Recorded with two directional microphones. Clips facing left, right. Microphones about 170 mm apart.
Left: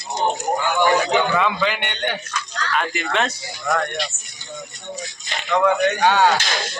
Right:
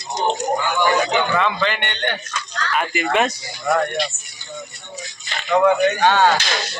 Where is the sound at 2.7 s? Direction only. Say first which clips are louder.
Right 3 dB; 10° right (ahead or behind).